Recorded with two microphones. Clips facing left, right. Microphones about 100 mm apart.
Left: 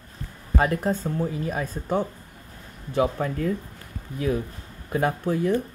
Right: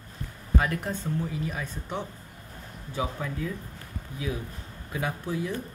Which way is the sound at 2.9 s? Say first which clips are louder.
Left 8 dB; 55° left (ahead or behind).